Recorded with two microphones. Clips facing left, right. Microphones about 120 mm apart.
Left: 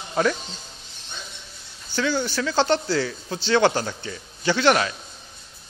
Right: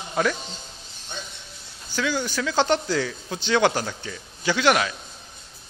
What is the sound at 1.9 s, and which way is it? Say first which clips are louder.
Speech: left 2 dB; 10° right (ahead or behind).